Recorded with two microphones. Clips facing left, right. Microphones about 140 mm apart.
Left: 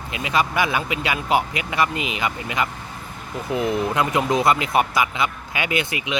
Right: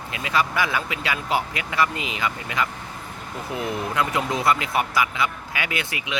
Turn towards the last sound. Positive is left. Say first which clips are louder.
# left 5 dB
turn(degrees=20)  # may be behind; listen again after turning